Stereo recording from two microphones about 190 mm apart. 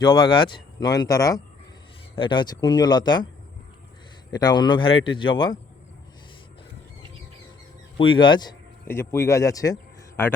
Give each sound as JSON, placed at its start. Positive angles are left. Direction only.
{"t": 0.1, "sound": "speech", "side_deg": 25}
{"t": 4.3, "sound": "speech", "side_deg": 20}
{"t": 7.9, "sound": "speech", "side_deg": 25}